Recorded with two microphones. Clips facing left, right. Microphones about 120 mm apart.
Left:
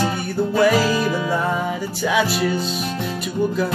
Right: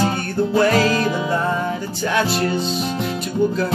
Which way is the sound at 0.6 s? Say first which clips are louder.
Left 1 dB; 5° left (ahead or behind).